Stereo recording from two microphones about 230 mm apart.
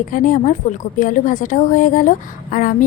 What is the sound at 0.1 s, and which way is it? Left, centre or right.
A woman's voice, left.